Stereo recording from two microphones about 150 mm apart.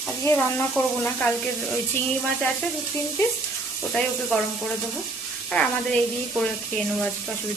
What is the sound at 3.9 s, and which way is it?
Speech, 5° left (ahead or behind).